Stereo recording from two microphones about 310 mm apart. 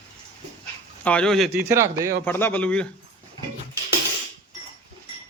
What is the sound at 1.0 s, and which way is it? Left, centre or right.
Speech, centre.